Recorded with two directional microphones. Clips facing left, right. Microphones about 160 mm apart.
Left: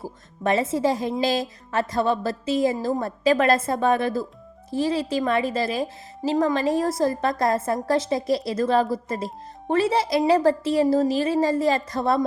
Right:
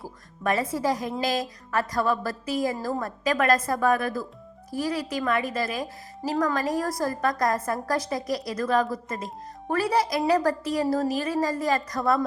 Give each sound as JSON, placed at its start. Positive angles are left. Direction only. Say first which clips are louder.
{"t": 0.0, "sound": "speech", "louder": "left 3 dB", "side_deg": 25}